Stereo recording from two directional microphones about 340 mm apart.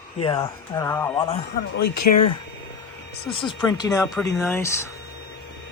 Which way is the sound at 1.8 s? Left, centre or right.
Left.